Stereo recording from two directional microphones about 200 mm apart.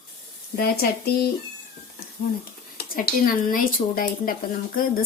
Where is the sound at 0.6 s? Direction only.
50° left (ahead or behind).